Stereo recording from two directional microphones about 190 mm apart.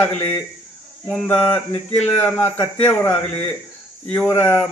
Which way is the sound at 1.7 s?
35° left (ahead or behind).